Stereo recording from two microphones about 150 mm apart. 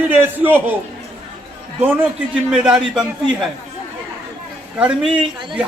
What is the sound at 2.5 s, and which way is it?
A man's voice, 5° right (ahead or behind).